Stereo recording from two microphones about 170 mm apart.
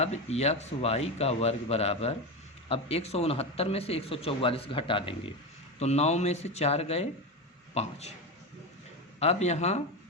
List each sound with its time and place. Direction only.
0.0 s speech: 40° left (ahead or behind)
9.1 s speech: 40° left (ahead or behind)